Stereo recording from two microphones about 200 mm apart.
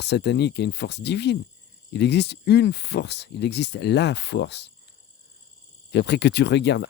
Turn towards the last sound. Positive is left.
turn(degrees=60)  # may be behind; listen again after turning